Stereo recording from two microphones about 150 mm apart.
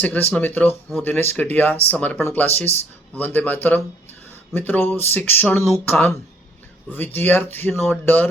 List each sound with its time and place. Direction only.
0.0 s speech: 10° left (ahead or behind)
2.7 s speech: 45° left (ahead or behind)
3.2 s speech: 10° left (ahead or behind)